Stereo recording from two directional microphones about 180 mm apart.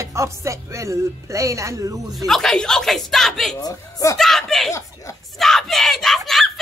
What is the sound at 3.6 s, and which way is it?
Speech, 20° left (ahead or behind).